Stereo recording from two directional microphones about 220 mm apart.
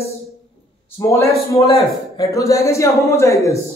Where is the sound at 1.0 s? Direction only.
15° left (ahead or behind).